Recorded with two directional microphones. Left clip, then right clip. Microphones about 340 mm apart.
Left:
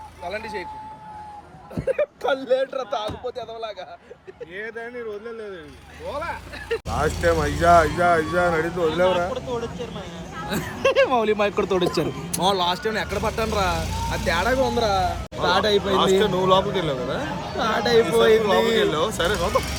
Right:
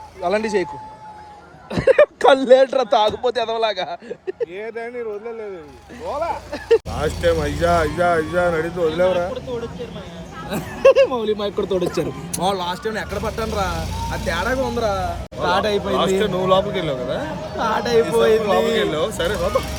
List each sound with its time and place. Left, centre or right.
1.9 s speech: right
6.9 s speech: centre